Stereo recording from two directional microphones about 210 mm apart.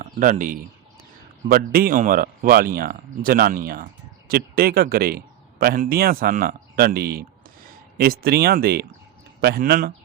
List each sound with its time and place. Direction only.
0.0 s a man's voice: 40° right (ahead or behind)